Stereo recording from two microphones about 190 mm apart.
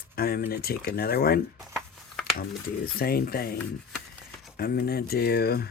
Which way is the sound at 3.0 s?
50° left (ahead or behind).